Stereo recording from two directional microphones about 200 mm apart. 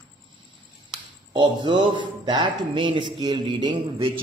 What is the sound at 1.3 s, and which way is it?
Speech, 20° right (ahead or behind).